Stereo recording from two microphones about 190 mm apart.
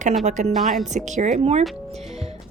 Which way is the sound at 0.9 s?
40° right (ahead or behind).